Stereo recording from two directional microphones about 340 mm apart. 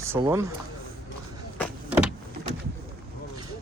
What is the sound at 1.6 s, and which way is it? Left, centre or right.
Vehicle, centre.